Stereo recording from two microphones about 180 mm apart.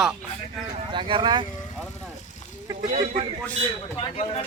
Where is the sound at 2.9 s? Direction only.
45° right (ahead or behind).